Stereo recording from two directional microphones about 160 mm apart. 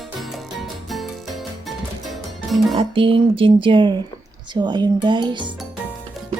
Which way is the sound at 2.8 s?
35° right (ahead or behind).